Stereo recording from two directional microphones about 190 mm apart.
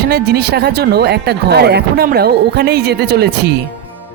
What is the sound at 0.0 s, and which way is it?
Speech, 60° right (ahead or behind).